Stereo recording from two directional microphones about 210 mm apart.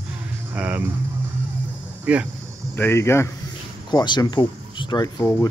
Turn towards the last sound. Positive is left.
turn(degrees=15)  # may be behind; listen again after turning